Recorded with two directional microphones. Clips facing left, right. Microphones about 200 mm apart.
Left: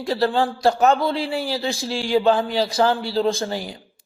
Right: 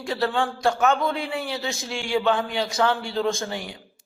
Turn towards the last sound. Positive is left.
turn(degrees=35)  # may be behind; listen again after turning